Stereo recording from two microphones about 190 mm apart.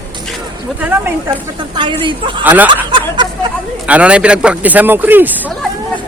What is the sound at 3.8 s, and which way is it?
Speech, 5° right (ahead or behind).